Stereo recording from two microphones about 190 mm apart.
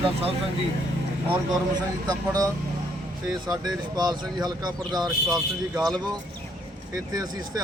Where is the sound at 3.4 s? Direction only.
20° right (ahead or behind).